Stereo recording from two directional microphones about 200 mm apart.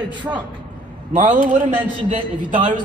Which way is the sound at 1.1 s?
40° right (ahead or behind).